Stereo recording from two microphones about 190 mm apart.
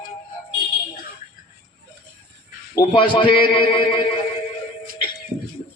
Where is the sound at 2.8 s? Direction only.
25° left (ahead or behind).